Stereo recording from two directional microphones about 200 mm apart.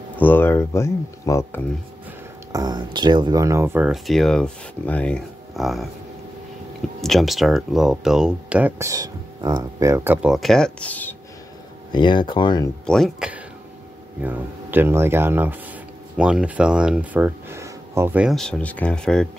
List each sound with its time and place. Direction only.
0.2 s speech: 10° left (ahead or behind)
2.5 s speech: 20° right (ahead or behind); by 5.9 s centre (ahead or behind)
7.0 s speech: centre (ahead or behind)
11.9 s speech: 25° left (ahead or behind)
12.8 s speech: centre (ahead or behind)